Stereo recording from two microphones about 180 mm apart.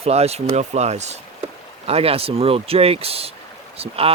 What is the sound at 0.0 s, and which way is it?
Speech, 35° right (ahead or behind).